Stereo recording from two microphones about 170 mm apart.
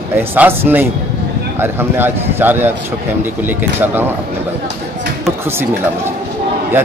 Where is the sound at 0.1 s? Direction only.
10° right (ahead or behind).